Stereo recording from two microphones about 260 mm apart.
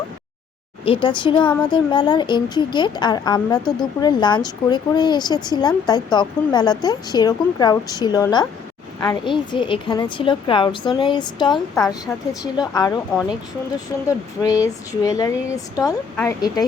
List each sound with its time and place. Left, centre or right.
0.9 s speech: centre
12.0 s a woman's voice: centre
12.5 s speech: centre